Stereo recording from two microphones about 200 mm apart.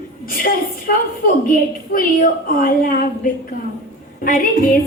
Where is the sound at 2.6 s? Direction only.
45° left (ahead or behind).